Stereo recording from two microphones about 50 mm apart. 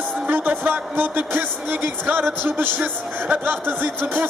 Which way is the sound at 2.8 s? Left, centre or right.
Right.